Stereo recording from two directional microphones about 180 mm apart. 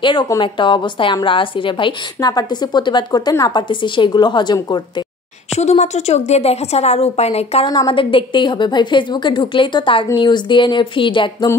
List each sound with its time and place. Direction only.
0.0 s a woman's voice: 25° left (ahead or behind)
5.6 s a woman's voice: 40° left (ahead or behind)